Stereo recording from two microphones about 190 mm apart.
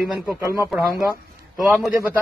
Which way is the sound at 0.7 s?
Centre (ahead or behind).